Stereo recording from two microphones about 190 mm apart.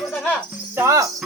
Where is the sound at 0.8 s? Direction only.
15° right (ahead or behind).